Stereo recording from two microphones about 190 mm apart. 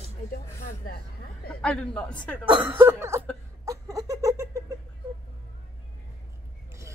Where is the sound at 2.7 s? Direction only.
15° right (ahead or behind).